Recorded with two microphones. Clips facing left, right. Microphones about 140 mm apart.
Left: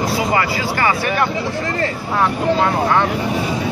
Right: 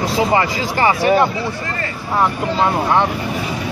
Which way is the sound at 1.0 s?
25° right (ahead or behind).